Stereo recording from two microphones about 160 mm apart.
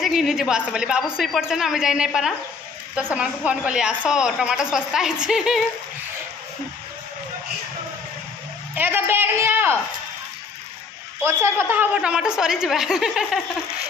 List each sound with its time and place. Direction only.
0.0 s a woman's voice: centre (ahead or behind)
8.7 s speech: 15° right (ahead or behind)
11.2 s a woman's voice: 15° right (ahead or behind)